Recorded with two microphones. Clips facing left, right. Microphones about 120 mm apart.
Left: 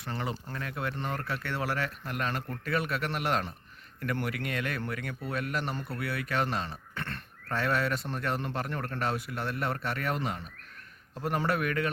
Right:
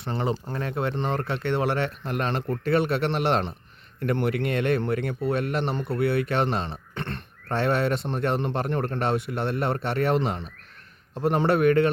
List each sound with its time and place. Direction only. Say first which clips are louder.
0.0 s speech: right 8 dB; 25° right (ahead or behind)